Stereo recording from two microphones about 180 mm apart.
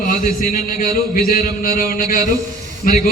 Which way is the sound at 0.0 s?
50° left (ahead or behind).